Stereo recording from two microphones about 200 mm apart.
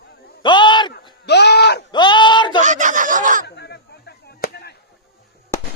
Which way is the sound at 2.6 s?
40° right (ahead or behind).